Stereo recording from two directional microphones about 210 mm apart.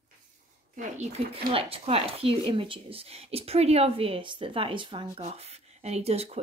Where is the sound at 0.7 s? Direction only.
35° right (ahead or behind).